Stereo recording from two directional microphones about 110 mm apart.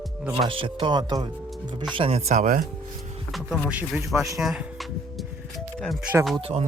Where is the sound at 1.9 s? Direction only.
65° right (ahead or behind).